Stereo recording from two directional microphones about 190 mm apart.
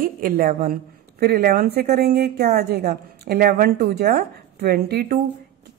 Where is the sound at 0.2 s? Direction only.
50° right (ahead or behind).